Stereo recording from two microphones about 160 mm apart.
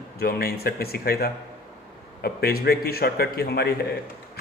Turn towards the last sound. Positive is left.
turn(degrees=85)